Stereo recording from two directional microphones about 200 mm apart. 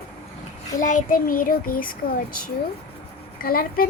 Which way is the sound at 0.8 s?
40° left (ahead or behind).